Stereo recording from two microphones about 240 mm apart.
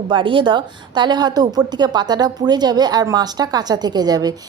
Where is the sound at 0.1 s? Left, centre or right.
Right.